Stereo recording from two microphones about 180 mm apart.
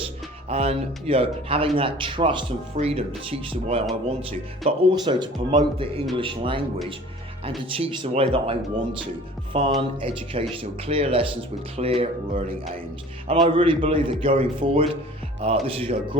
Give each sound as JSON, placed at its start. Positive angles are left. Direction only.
{"t": 0.4, "sound": "speech", "side_deg": -35}
{"t": 7.8, "sound": "speech", "side_deg": -30}
{"t": 13.2, "sound": "speech", "side_deg": -30}